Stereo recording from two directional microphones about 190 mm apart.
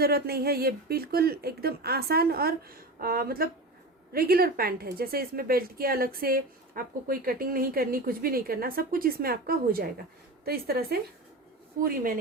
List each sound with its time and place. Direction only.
0.0 s a woman's voice: 55° right (ahead or behind)